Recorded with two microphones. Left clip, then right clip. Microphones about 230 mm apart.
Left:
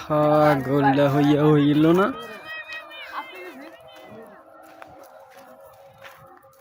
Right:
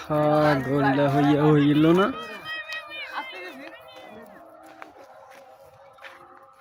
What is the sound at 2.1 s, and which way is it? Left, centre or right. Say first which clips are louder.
Run: right 1 dB; right.